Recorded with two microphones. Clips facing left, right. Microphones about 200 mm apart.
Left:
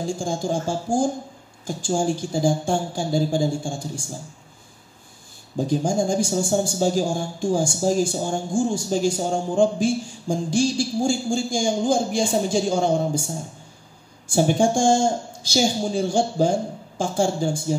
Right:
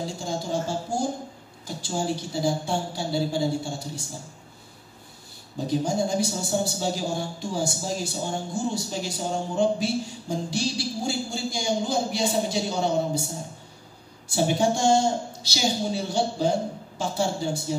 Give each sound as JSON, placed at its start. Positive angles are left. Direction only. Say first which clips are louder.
{"t": 0.2, "sound": "speech", "louder": "left 4 dB", "side_deg": 50}
{"t": 5.7, "sound": "speech", "louder": "left 3 dB", "side_deg": 50}
{"t": 14.2, "sound": "speech", "louder": "left 4 dB", "side_deg": 50}